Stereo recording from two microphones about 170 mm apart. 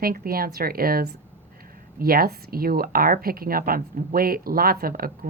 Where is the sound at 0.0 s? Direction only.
60° right (ahead or behind).